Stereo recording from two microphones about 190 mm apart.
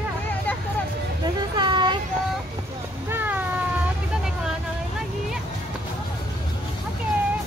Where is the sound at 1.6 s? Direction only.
25° right (ahead or behind).